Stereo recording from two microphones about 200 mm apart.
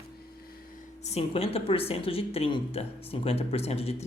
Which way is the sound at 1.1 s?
30° left (ahead or behind).